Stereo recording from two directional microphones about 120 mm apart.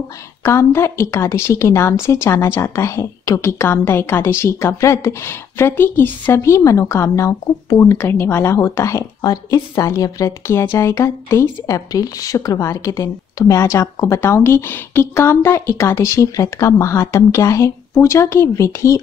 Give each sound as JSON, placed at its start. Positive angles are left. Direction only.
{"t": 0.4, "sound": "a woman's voice", "side_deg": 20}